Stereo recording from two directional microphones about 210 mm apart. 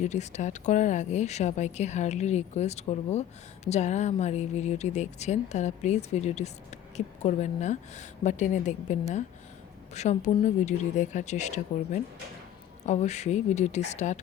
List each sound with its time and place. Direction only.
0.0 s speech: 35° left (ahead or behind)